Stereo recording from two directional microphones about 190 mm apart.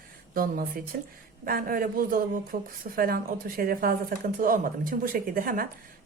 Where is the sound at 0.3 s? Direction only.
50° right (ahead or behind).